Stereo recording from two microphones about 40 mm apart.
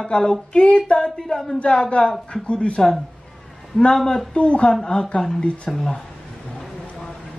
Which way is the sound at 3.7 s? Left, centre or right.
Centre.